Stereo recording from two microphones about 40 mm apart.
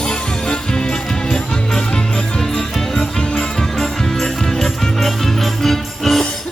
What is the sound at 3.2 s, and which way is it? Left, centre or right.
Music, left.